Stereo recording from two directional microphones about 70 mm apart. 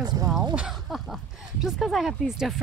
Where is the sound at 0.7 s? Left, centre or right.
Centre.